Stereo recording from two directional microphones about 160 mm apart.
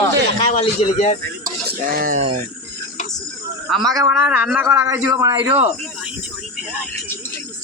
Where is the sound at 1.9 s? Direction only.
60° right (ahead or behind).